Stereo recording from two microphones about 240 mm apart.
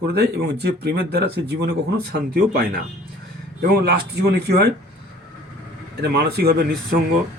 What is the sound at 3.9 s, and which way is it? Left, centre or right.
Speech, right.